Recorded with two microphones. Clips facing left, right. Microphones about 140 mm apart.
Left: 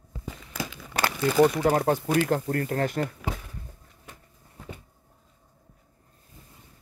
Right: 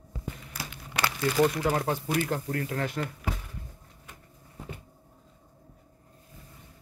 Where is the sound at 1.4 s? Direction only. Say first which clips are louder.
Left 5 dB; 40° left (ahead or behind).